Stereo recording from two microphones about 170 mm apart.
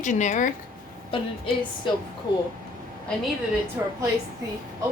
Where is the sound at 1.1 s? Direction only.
30° left (ahead or behind).